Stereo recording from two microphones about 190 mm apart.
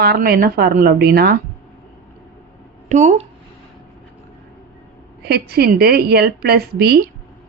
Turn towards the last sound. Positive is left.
turn(degrees=-55)  # may be behind; listen again after turning